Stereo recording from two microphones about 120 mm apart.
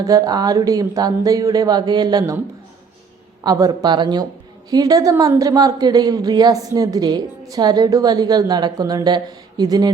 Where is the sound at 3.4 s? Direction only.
30° right (ahead or behind).